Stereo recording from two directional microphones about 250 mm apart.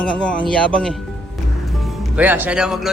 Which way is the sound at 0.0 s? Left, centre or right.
Centre.